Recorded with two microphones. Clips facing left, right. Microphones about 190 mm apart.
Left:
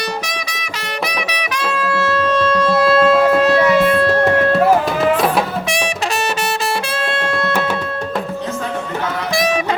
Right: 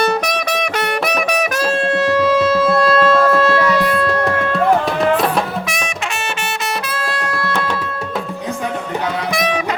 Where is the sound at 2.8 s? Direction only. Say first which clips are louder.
Left 4 dB; 5° left (ahead or behind); by 4.2 s 25° left (ahead or behind).